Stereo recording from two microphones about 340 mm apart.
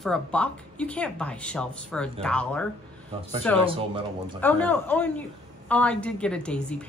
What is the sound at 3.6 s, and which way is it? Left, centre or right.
Speech, centre.